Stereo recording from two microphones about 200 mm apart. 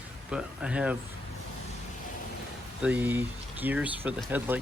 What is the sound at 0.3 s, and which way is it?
Speech, 5° right (ahead or behind).